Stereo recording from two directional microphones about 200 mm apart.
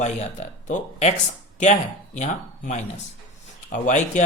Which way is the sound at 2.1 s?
35° left (ahead or behind).